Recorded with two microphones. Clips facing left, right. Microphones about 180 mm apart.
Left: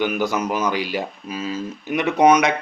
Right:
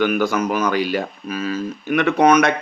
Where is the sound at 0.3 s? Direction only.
20° left (ahead or behind).